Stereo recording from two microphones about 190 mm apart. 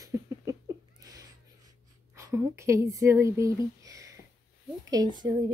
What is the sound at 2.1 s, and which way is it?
Speech, 15° right (ahead or behind).